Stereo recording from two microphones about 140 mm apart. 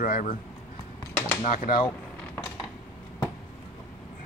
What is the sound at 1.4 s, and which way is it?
Speech, 70° left (ahead or behind).